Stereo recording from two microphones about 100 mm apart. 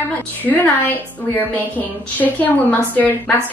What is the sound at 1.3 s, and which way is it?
A woman's voice, 20° left (ahead or behind).